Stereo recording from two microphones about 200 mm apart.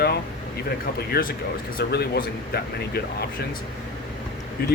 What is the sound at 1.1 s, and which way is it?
Speech, 50° left (ahead or behind).